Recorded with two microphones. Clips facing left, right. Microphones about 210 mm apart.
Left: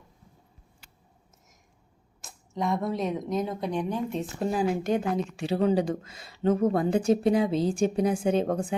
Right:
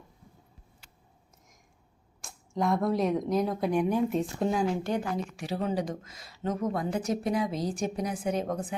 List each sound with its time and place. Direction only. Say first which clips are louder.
2.2 s speech: right 1 dB; centre (ahead or behind)
4.2 s speech: even; 5° left (ahead or behind)
4.8 s a woman's voice: left 4 dB; 20° left (ahead or behind)